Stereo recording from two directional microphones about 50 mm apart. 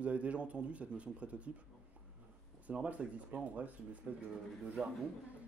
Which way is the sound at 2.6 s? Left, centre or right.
Right.